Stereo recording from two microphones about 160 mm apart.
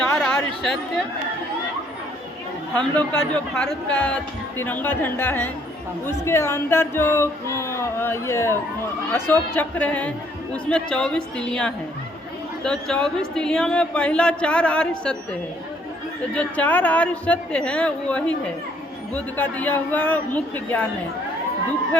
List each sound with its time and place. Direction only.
0.0 s a sound: 5° left (ahead or behind)
2.7 s speech: 10° left (ahead or behind)
16.3 s speech: 10° left (ahead or behind)